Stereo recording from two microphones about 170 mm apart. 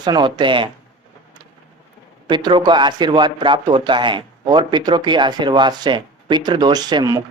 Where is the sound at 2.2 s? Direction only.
25° right (ahead or behind).